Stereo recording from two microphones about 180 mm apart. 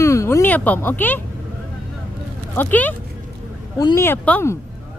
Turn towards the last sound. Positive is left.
turn(degrees=10)  # may be behind; listen again after turning